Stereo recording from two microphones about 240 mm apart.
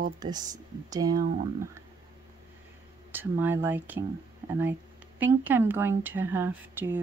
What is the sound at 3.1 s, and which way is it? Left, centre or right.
Speech, centre.